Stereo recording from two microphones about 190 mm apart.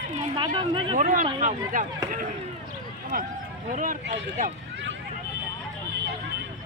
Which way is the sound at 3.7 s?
45° right (ahead or behind).